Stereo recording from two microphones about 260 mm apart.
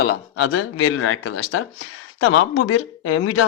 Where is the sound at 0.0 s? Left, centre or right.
Left.